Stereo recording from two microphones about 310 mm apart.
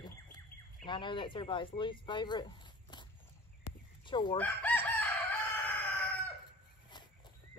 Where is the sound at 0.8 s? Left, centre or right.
Centre.